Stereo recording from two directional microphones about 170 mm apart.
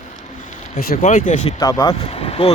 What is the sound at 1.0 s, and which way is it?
Speech, 50° left (ahead or behind).